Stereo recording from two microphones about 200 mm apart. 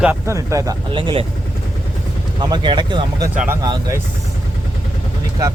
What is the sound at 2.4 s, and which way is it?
Speech, 20° right (ahead or behind).